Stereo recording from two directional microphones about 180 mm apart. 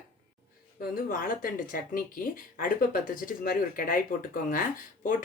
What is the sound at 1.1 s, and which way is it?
Speech, 50° left (ahead or behind).